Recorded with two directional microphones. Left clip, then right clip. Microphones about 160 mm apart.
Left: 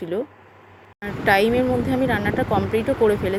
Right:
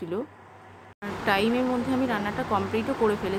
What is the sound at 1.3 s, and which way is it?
Speech, 30° left (ahead or behind).